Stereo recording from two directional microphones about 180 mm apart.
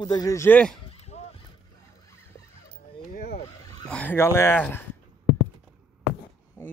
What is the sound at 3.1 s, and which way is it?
Vehicle, 55° left (ahead or behind).